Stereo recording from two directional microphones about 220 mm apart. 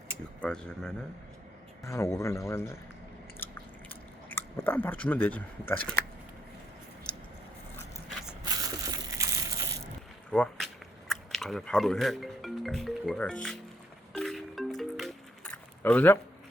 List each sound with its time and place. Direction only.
0.4 s speech: 5° left (ahead or behind)
1.8 s a man's voice: 15° left (ahead or behind)
3.4 s chewing: 10° left (ahead or behind)
7.1 s a sound: 5° left (ahead or behind)
8.4 s crushing: 15° right (ahead or behind)
10.3 s speech: 5° left (ahead or behind)
14.1 s music: centre (ahead or behind)